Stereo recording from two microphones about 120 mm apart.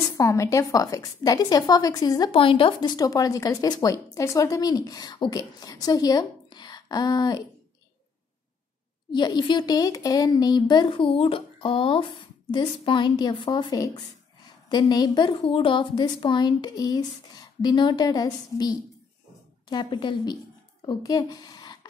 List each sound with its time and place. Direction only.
0.2 s a woman's voice: 25° left (ahead or behind)
2.3 s speech: 50° left (ahead or behind); by 7.4 s 35° left (ahead or behind)
9.1 s a woman's voice: 35° left (ahead or behind)